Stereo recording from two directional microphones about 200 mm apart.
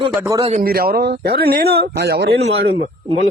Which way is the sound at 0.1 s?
15° right (ahead or behind).